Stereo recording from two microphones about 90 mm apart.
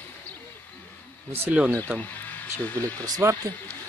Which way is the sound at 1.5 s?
15° right (ahead or behind).